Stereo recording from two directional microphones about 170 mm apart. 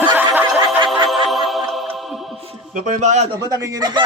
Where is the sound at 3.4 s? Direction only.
20° right (ahead or behind).